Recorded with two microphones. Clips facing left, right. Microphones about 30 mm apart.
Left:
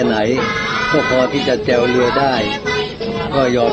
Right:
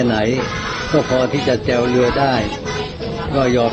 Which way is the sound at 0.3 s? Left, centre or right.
Left.